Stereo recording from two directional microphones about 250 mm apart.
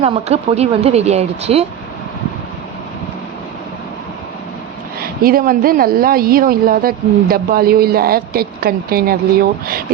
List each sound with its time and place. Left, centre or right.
0.0 s speech: right
4.9 s a woman's voice: right